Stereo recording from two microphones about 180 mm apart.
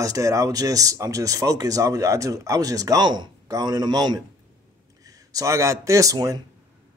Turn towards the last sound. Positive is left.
turn(degrees=-20)  # may be behind; listen again after turning